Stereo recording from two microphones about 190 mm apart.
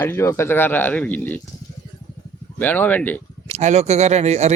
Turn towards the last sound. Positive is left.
turn(degrees=-35)  # may be behind; listen again after turning